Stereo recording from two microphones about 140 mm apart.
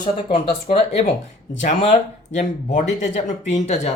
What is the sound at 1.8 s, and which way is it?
Speech, 50° left (ahead or behind).